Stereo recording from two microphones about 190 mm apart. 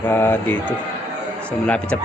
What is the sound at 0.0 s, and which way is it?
Speech, 10° left (ahead or behind).